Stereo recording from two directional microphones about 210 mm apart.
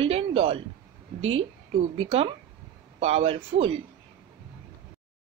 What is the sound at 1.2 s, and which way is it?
Speech, 70° right (ahead or behind).